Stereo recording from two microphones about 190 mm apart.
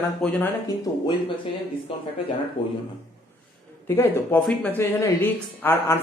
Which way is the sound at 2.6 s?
25° left (ahead or behind).